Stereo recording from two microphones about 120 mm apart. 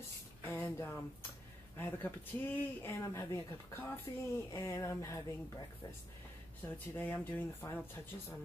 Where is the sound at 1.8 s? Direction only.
15° left (ahead or behind).